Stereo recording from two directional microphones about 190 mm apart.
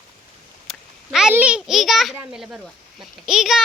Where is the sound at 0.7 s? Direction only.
5° right (ahead or behind).